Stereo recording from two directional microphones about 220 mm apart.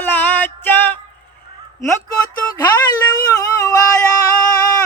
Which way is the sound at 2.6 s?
15° left (ahead or behind).